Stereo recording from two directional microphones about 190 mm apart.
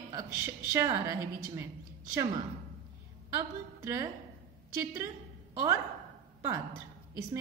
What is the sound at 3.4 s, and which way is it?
Speech, 15° right (ahead or behind).